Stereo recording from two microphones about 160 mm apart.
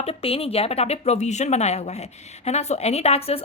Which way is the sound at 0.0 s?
35° left (ahead or behind).